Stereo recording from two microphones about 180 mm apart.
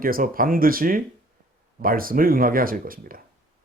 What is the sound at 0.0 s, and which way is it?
A man's voice, 50° right (ahead or behind).